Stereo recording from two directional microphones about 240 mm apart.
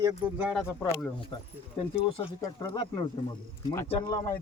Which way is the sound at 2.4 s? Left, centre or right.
Centre.